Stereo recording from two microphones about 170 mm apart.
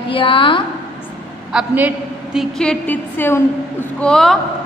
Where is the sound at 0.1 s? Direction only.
30° left (ahead or behind).